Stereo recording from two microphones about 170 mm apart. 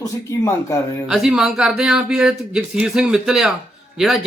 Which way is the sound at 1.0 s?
5° right (ahead or behind).